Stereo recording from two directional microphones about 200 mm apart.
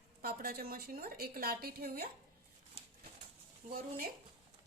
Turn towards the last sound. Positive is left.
turn(degrees=-45)  # may be behind; listen again after turning